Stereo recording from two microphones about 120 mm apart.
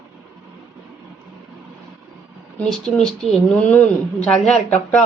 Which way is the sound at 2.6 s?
5° left (ahead or behind).